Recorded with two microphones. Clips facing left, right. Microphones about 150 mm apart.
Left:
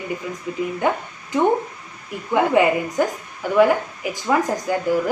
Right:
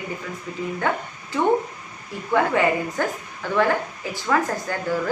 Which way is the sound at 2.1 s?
15° left (ahead or behind).